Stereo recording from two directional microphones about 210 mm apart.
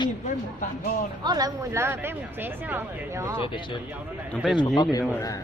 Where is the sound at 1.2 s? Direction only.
20° right (ahead or behind).